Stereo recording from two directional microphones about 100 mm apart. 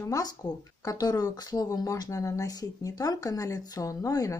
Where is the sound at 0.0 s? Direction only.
35° left (ahead or behind).